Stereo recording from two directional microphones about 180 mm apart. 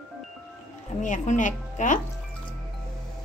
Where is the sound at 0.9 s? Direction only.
45° left (ahead or behind).